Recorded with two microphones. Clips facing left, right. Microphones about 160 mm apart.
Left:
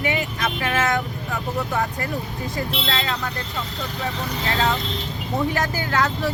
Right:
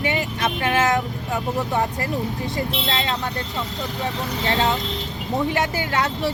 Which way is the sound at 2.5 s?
20° right (ahead or behind).